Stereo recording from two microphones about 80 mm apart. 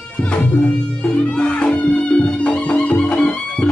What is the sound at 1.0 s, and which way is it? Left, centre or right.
Music, centre.